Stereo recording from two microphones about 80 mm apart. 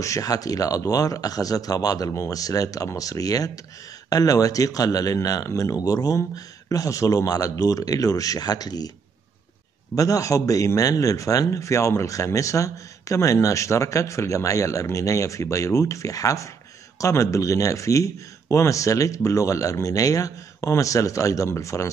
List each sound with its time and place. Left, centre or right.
0.0 s speech: left
9.9 s speech: left